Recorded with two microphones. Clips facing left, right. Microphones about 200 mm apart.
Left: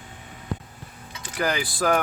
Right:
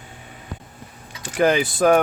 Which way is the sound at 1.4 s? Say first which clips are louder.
Right 8 dB; 20° right (ahead or behind).